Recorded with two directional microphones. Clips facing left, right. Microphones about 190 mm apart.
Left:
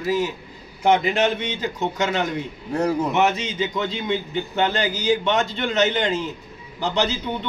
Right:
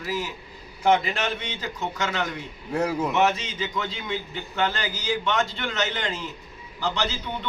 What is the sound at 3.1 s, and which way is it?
A man's voice, 20° left (ahead or behind).